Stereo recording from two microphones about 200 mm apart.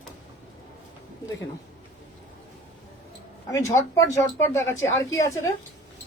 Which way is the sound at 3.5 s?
15° left (ahead or behind).